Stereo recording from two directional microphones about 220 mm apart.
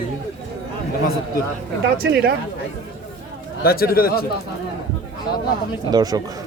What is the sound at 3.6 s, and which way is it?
Speech, 45° left (ahead or behind).